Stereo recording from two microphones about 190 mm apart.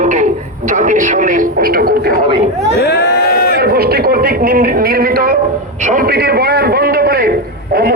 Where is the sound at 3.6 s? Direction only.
55° right (ahead or behind).